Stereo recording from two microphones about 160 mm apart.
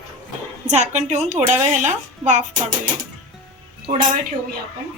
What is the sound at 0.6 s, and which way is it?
Speech, 45° right (ahead or behind).